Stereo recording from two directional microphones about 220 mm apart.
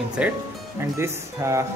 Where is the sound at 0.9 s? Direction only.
10° right (ahead or behind).